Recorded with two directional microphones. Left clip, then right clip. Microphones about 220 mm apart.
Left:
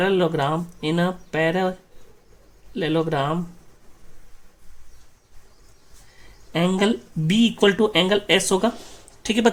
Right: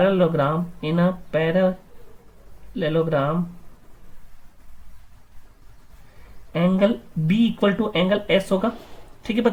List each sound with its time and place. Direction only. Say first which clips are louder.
0.0 s speech: right 2 dB; 45° left (ahead or behind)
2.7 s speech: right 1 dB; 45° left (ahead or behind)
6.5 s speech: right 1 dB; 45° left (ahead or behind)